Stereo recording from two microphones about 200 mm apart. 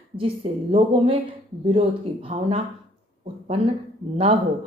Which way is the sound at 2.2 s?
30° right (ahead or behind).